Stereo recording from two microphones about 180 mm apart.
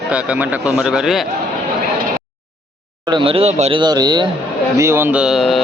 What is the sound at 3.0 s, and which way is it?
Speech, 30° right (ahead or behind).